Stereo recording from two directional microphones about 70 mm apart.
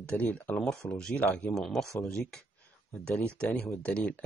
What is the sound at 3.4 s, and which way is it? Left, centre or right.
Speech, centre.